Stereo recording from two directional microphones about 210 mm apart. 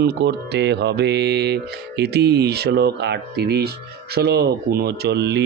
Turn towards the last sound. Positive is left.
turn(degrees=-55)  # may be behind; listen again after turning